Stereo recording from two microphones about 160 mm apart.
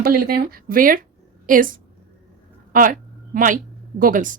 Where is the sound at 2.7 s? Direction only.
60° right (ahead or behind).